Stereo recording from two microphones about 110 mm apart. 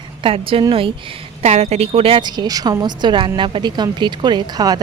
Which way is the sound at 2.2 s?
35° right (ahead or behind).